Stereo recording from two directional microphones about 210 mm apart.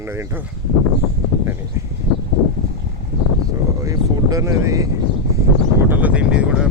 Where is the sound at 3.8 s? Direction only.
15° right (ahead or behind).